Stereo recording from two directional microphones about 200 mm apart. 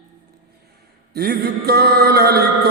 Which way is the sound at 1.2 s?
50° right (ahead or behind).